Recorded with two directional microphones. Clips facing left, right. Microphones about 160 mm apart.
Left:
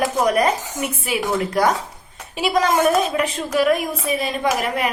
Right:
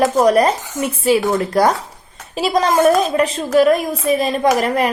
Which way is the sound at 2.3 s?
35° right (ahead or behind).